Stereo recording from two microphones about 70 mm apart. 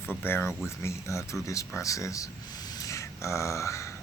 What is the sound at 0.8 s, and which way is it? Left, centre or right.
Speech, left.